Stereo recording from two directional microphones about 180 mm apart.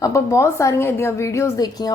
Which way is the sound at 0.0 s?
15° left (ahead or behind).